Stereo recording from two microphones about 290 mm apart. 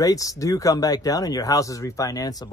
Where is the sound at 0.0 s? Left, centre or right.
Centre.